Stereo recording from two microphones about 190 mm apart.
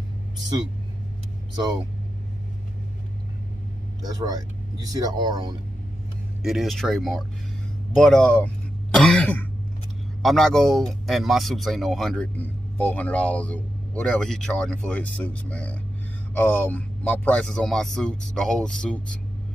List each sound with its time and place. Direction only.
4.2 s speech: 20° right (ahead or behind)
6.4 s speech: centre (ahead or behind)
8.9 s throat clearing: 5° left (ahead or behind)
10.2 s speech: centre (ahead or behind)